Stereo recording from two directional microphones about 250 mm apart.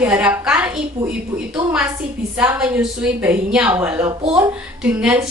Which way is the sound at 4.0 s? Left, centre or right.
Right.